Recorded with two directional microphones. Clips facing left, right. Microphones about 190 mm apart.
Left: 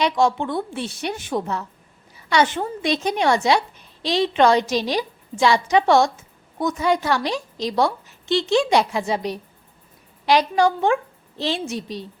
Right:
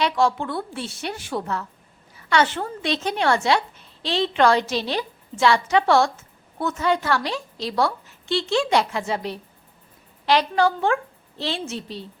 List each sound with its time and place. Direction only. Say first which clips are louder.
0.0 s a woman's voice: left 2 dB; 20° left (ahead or behind)